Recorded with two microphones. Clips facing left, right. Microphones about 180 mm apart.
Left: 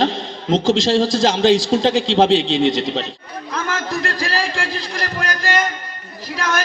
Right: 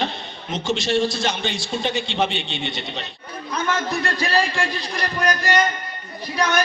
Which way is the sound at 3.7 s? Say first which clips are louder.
Left 2 dB; 90° left.